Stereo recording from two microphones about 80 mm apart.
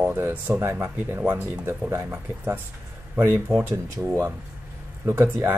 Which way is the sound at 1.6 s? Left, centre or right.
Right.